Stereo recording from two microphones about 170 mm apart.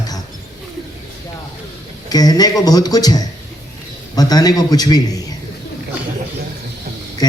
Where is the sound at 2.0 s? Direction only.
20° left (ahead or behind).